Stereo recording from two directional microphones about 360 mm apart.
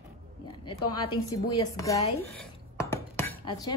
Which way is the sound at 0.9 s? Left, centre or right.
Centre.